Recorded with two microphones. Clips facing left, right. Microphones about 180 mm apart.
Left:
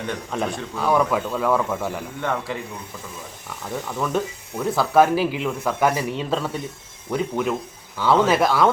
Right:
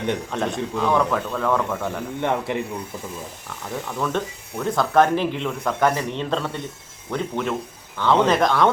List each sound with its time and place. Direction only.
0.3 s speech: 5° left (ahead or behind)
2.2 s speech: 20° right (ahead or behind)
3.8 s speech: 5° left (ahead or behind)